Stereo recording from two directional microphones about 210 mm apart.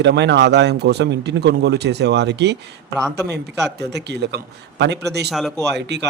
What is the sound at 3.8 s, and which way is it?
Speech, 55° right (ahead or behind).